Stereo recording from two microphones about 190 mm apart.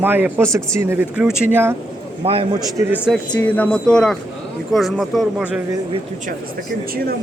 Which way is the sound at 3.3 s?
10° left (ahead or behind).